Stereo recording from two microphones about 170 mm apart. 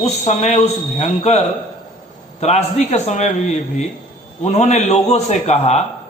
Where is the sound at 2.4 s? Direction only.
40° left (ahead or behind).